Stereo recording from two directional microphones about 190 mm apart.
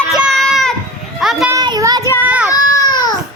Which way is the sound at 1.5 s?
20° right (ahead or behind).